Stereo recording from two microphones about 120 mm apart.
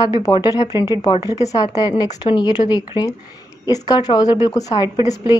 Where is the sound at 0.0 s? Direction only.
35° left (ahead or behind).